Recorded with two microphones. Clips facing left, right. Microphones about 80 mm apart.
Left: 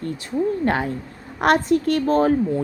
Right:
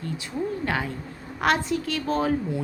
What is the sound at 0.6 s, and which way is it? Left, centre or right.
A woman's voice, left.